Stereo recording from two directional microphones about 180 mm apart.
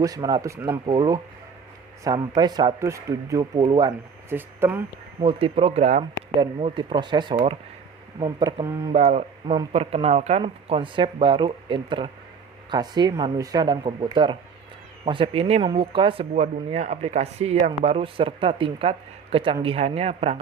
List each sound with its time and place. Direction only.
0.0 s speech: 20° right (ahead or behind)
4.4 s speech: 10° right (ahead or behind)
5.2 s speech: 30° right (ahead or behind)
6.4 s speech: 30° right (ahead or behind)
16.3 s speech: 40° right (ahead or behind)